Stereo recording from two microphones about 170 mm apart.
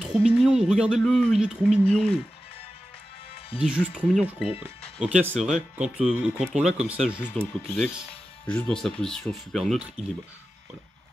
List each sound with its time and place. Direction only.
0.0 s speech: centre (ahead or behind)
3.5 s speech: 5° right (ahead or behind)
4.5 s speech: 35° left (ahead or behind)
5.0 s speech: 5° right (ahead or behind)
7.3 s speech: 5° left (ahead or behind)